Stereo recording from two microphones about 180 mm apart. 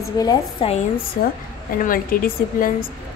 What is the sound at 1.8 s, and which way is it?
A woman's voice, 50° left (ahead or behind).